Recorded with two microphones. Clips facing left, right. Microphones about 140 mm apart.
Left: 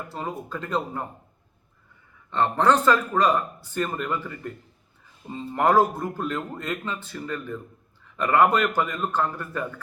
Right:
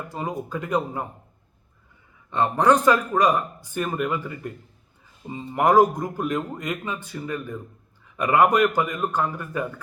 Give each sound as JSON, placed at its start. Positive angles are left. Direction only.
{"t": 0.1, "sound": "speech", "side_deg": -15}
{"t": 2.3, "sound": "speech", "side_deg": -15}